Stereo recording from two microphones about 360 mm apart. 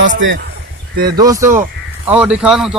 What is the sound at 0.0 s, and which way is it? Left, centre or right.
Speech, right.